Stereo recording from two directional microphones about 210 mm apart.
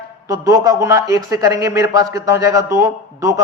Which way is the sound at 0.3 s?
15° right (ahead or behind).